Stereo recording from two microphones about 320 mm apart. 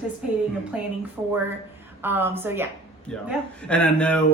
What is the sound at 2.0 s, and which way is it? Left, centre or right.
Speech, centre.